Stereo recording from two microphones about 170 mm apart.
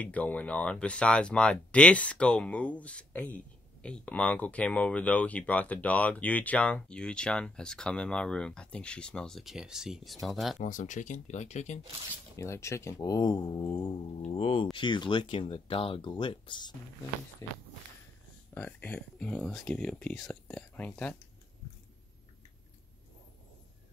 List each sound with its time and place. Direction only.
0.0 s speech: 10° left (ahead or behind)
10.6 s speech: 45° left (ahead or behind)
12.4 s speech: 15° left (ahead or behind)